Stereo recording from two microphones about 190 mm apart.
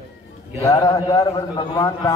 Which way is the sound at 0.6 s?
20° left (ahead or behind).